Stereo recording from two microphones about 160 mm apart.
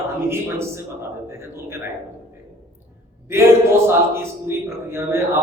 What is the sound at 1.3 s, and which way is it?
Speech, 15° right (ahead or behind).